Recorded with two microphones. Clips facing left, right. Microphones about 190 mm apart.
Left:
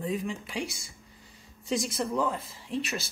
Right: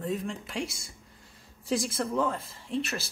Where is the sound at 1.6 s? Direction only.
Centre (ahead or behind).